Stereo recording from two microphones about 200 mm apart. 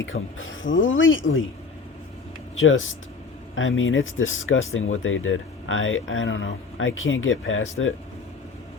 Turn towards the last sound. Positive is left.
turn(degrees=75)  # may be behind; listen again after turning